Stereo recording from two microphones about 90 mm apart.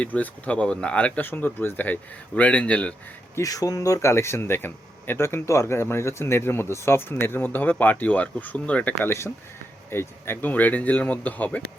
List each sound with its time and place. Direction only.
0.0 s speech: 15° left (ahead or behind)
3.3 s speech: 40° left (ahead or behind); by 9.0 s 15° left (ahead or behind)
9.0 s speech: 30° left (ahead or behind)